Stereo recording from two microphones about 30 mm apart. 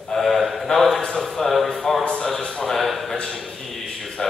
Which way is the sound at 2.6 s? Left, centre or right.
Centre.